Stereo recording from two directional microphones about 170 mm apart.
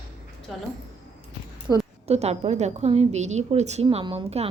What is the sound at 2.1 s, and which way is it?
A woman's voice, 40° right (ahead or behind).